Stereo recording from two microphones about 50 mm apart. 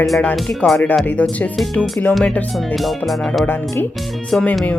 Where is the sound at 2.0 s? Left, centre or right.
Left.